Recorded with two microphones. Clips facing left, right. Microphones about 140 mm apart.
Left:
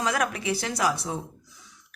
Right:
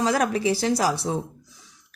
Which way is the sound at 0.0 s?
30° right (ahead or behind).